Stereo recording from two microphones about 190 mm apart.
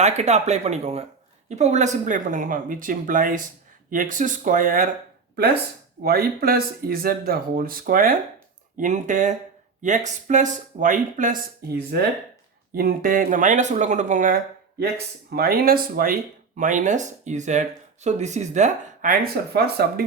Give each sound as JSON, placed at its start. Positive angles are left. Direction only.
{"t": 0.0, "sound": "speech", "side_deg": -35}
{"t": 6.0, "sound": "speech", "side_deg": -50}
{"t": 12.7, "sound": "speech", "side_deg": -50}